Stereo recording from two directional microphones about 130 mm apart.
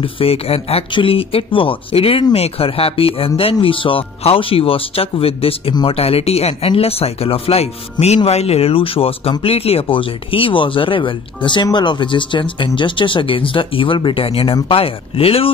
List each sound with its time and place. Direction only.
0.0 s speech: 50° left (ahead or behind)